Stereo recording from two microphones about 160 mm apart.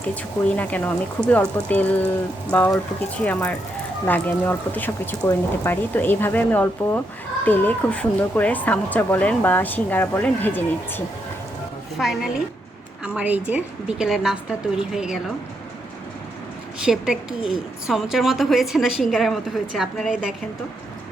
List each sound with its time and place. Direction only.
0.1 s speech: 10° left (ahead or behind)
11.9 s a woman's voice: centre (ahead or behind)
16.8 s a woman's voice: 5° right (ahead or behind)